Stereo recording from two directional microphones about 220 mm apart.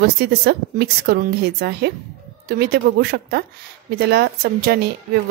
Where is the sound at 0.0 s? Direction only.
45° right (ahead or behind).